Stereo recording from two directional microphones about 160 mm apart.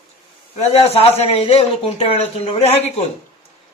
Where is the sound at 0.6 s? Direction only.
40° left (ahead or behind).